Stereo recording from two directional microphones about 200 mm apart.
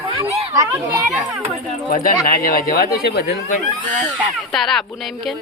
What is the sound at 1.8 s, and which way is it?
Speech, 45° left (ahead or behind).